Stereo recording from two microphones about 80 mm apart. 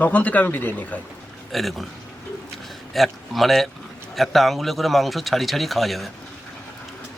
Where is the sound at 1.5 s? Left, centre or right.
Centre.